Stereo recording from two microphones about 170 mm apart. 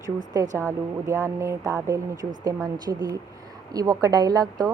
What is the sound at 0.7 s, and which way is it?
A woman's voice, 15° right (ahead or behind).